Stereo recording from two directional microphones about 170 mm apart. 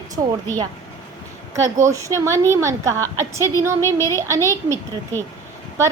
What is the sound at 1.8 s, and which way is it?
A woman's voice, 20° right (ahead or behind).